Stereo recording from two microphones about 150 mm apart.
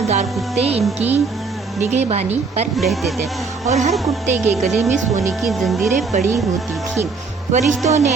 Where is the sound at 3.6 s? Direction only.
50° right (ahead or behind).